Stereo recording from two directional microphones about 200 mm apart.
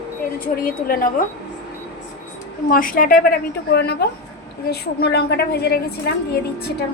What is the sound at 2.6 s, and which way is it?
A woman's voice, 45° left (ahead or behind).